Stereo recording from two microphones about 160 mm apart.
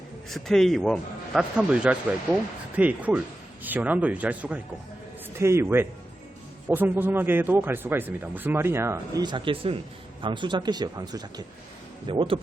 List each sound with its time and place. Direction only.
0.3 s speech: centre (ahead or behind); by 12.4 s 30° right (ahead or behind)